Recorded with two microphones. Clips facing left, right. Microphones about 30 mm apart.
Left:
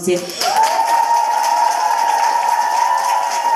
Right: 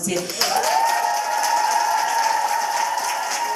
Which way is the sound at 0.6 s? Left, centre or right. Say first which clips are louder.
Left 6 dB; centre.